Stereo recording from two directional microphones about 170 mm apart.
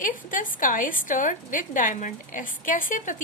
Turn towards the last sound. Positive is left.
turn(degrees=50)  # may be behind; listen again after turning